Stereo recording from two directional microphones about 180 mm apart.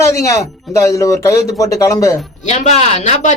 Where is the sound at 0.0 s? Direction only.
15° left (ahead or behind).